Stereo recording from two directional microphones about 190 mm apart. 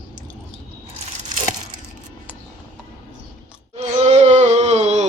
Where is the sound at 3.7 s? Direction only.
35° right (ahead or behind).